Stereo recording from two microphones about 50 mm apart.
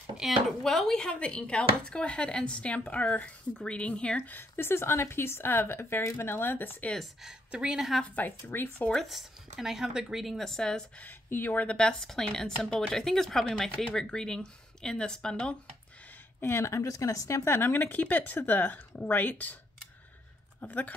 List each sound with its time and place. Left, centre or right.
0.5 s speech: centre; by 4.2 s left
4.3 s speech: left
7.2 s speech: centre
8.5 s speech: left
9.0 s speech: centre
10.2 s speech: centre
11.2 s speech: left
11.9 s speech: centre
16.5 s speech: left
17.5 s speech: left
20.6 s speech: left